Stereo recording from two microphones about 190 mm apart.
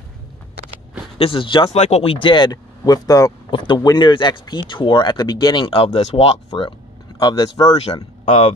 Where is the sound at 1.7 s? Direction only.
35° left (ahead or behind); by 7.8 s 20° left (ahead or behind).